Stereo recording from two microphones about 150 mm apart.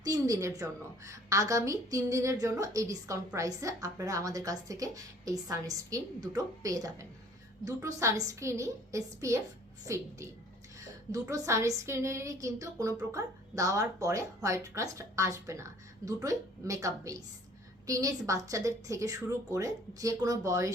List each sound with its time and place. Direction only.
0.0 s a woman's voice: 20° right (ahead or behind)